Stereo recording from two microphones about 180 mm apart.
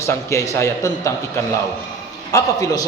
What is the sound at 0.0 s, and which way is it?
A man's voice, 15° left (ahead or behind).